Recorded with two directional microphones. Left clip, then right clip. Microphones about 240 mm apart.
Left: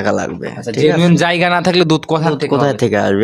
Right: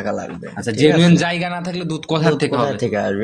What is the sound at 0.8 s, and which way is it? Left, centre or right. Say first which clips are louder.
Speech: left 1 dB; left.